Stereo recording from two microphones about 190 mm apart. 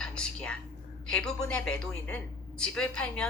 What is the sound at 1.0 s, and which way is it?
A woman's voice, 5° left (ahead or behind).